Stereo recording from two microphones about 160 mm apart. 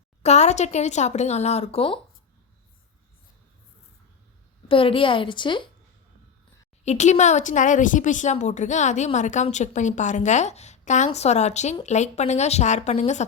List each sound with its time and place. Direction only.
0.2 s a woman's voice: 45° left (ahead or behind)
4.7 s a woman's voice: 35° left (ahead or behind)
6.8 s a woman's voice: 45° left (ahead or behind)